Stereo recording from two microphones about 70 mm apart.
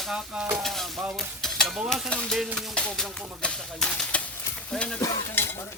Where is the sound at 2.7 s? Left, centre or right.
Centre.